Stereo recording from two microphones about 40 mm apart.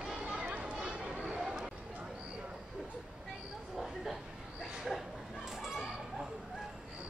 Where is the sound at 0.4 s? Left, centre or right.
Right.